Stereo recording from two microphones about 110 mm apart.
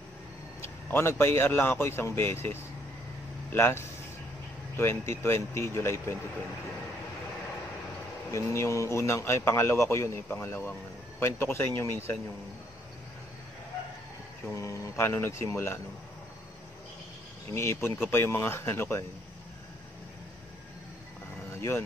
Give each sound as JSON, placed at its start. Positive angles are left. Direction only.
{"t": 0.6, "sound": "a man's voice", "side_deg": 20}
{"t": 8.3, "sound": "a man's voice", "side_deg": 25}
{"t": 14.5, "sound": "a man's voice", "side_deg": 30}
{"t": 17.6, "sound": "a man's voice", "side_deg": 25}
{"t": 21.5, "sound": "vehicle", "side_deg": 20}